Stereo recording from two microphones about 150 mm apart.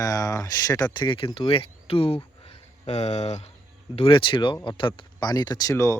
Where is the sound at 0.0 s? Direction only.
25° left (ahead or behind); by 3.5 s 45° left (ahead or behind).